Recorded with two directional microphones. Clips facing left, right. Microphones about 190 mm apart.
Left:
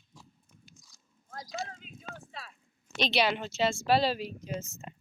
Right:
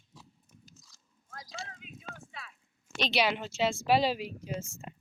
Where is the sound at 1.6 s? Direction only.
35° left (ahead or behind).